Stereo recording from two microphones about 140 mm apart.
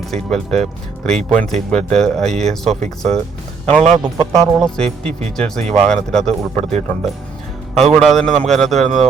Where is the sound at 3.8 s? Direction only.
50° right (ahead or behind).